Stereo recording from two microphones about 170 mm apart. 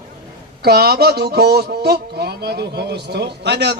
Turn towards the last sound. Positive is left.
turn(degrees=-85)